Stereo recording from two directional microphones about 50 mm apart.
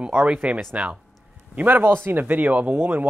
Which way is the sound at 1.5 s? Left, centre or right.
Right.